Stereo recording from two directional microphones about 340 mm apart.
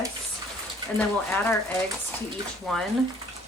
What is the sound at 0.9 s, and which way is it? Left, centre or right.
Speech, centre.